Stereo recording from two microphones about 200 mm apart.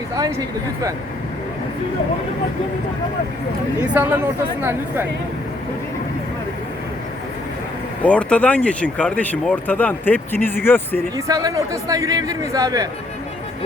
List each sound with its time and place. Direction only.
0.2 s speech: 15° right (ahead or behind)
3.8 s speech: 10° right (ahead or behind)
8.0 s speech: 5° left (ahead or behind)
11.3 s speech: 15° right (ahead or behind)